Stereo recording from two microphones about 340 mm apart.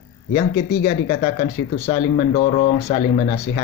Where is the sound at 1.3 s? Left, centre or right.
Centre.